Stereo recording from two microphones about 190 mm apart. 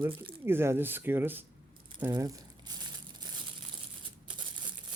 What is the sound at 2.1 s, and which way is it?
Crumpling, 20° right (ahead or behind).